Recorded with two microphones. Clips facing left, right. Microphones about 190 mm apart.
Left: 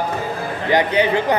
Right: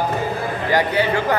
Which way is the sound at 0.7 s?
20° left (ahead or behind).